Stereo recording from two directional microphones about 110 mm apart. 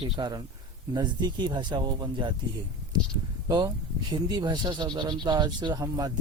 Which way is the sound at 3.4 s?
40° right (ahead or behind).